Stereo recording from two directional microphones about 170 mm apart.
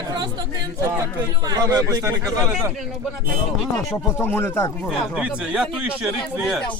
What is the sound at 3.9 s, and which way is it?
Speech, 10° left (ahead or behind).